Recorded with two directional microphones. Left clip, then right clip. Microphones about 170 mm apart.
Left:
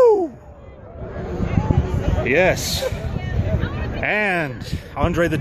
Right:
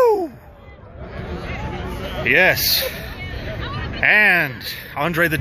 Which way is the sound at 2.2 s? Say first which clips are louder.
Right 2 dB; 15° left (ahead or behind).